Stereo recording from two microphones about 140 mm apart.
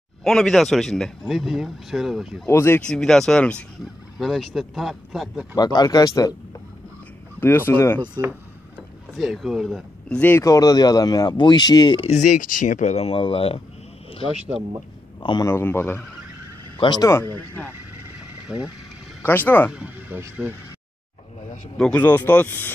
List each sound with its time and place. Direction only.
0.2 s speech: 5° left (ahead or behind)
2.4 s speech: 15° left (ahead or behind)
2.9 s speech: 5° left (ahead or behind)
5.6 s speech: 30° left (ahead or behind)
7.3 s speech: 15° left (ahead or behind)
8.7 s speech: centre (ahead or behind)
10.4 s speech: 25° left (ahead or behind)
12.1 s speech: 60° left (ahead or behind); by 13.6 s 40° left (ahead or behind)
15.4 s speech: 15° left (ahead or behind)
16.8 s speech: 30° left (ahead or behind)
18.5 s speech: 5° right (ahead or behind)
19.2 s speech: 15° left (ahead or behind)
19.7 s speech: 10° right (ahead or behind)
21.7 s speech: 10° left (ahead or behind)